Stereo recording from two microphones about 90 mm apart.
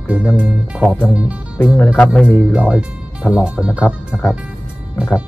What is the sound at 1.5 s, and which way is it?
Speech, 25° left (ahead or behind).